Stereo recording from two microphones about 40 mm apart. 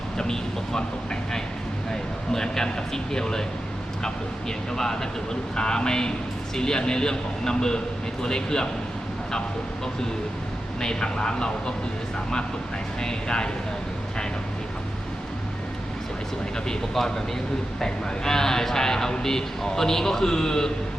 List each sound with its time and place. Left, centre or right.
0.2 s speech: centre
10.8 s speech: centre
13.0 s speech: centre
17.7 s speech: centre